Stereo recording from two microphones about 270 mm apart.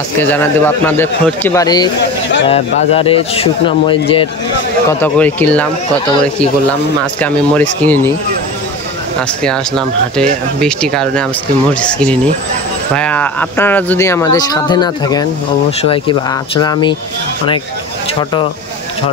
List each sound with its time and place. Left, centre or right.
0.2 s speech: centre
5.0 s speech: centre
7.2 s speech: centre
9.4 s speech: centre